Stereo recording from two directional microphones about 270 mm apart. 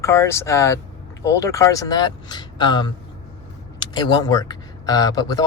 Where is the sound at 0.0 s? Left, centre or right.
Centre.